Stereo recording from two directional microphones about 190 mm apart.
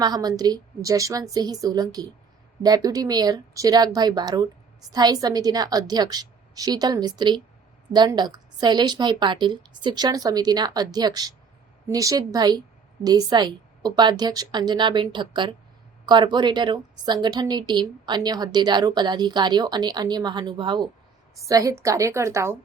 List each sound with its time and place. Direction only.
0.0 s a woman's voice: 20° right (ahead or behind)